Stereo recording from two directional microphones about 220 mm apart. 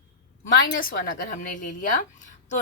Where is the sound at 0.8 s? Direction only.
40° left (ahead or behind).